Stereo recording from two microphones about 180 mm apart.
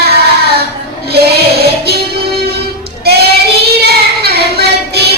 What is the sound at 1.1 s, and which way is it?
Music, 65° right (ahead or behind).